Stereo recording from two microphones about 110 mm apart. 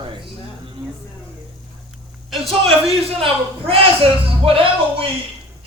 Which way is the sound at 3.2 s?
55° right (ahead or behind).